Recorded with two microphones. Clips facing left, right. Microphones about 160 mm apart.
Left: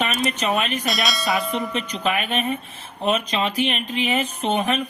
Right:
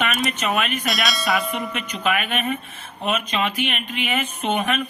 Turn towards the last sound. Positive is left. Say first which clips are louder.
# left 1 dB
turn(degrees=35)  # may be behind; listen again after turning